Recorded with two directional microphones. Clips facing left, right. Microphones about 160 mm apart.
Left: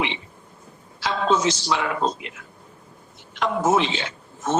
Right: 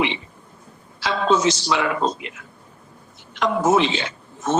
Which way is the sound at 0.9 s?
90° right.